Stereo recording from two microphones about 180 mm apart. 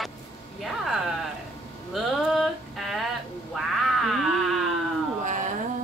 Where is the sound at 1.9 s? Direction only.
Centre (ahead or behind).